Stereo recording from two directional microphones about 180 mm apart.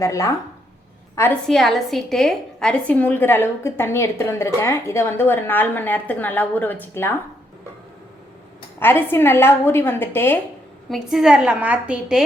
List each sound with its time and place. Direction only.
0.0 s a woman's voice: 15° left (ahead or behind)
1.5 s a woman's voice: centre (ahead or behind)
8.8 s a woman's voice: 10° left (ahead or behind)
10.8 s a woman's voice: centre (ahead or behind)